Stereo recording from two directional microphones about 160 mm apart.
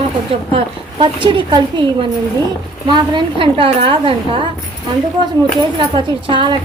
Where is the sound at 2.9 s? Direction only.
30° right (ahead or behind).